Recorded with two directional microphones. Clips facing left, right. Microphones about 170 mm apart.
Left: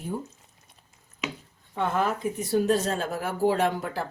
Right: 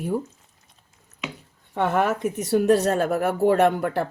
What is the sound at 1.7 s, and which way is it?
A woman's voice, 70° right (ahead or behind).